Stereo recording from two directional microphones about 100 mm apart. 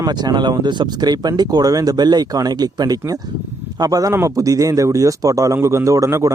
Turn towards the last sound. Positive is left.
turn(degrees=-30)  # may be behind; listen again after turning